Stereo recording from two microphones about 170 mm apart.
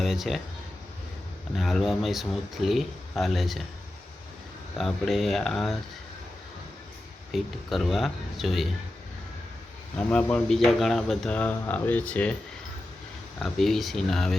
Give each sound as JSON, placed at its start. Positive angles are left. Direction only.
{"t": 0.0, "sound": "speech", "side_deg": 0}
{"t": 1.5, "sound": "speech", "side_deg": 0}
{"t": 4.8, "sound": "speech", "side_deg": 0}
{"t": 7.3, "sound": "speech", "side_deg": 0}
{"t": 10.1, "sound": "speech", "side_deg": 5}
{"t": 13.4, "sound": "speech", "side_deg": 0}